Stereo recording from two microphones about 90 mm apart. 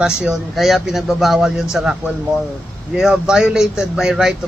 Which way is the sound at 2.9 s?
5° right (ahead or behind).